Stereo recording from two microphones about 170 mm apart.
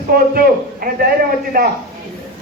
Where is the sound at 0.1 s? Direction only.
60° right (ahead or behind).